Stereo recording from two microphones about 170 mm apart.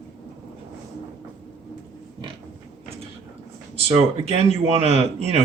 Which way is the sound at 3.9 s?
35° right (ahead or behind).